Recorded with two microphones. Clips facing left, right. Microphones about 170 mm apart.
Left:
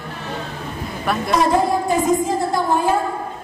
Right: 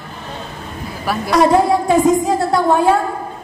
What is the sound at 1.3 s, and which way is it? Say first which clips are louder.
A woman's voice: right 5 dB; 75° right (ahead or behind).